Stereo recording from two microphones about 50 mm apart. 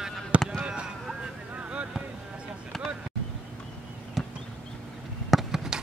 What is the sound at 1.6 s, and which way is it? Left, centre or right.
Boat, right.